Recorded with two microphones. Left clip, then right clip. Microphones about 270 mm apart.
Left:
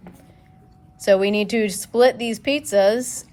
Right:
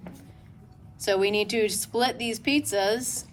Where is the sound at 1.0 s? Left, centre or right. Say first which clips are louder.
Left 7 dB; left.